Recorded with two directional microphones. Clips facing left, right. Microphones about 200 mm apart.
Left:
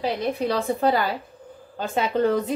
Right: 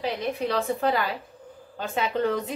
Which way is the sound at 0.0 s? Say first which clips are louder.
Left 3 dB; 35° left (ahead or behind).